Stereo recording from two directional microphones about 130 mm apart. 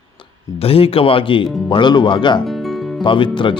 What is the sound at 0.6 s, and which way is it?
Speech, 45° left (ahead or behind).